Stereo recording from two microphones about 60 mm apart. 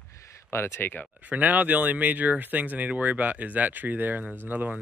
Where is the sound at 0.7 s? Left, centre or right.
Left.